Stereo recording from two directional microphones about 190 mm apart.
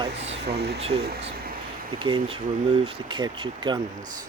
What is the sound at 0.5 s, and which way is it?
Speech, 60° right (ahead or behind).